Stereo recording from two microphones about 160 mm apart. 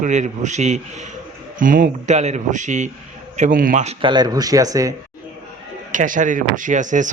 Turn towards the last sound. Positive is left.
turn(degrees=-50)  # may be behind; listen again after turning